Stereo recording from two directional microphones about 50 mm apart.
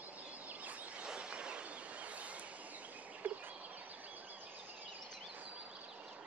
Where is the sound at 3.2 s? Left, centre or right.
Right.